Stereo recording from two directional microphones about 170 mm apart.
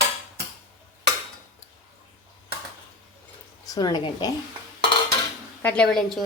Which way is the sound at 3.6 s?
25° left (ahead or behind).